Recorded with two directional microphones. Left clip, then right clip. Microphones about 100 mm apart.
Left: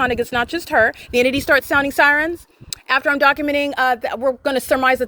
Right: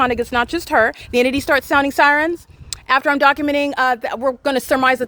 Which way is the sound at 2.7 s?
35° right (ahead or behind).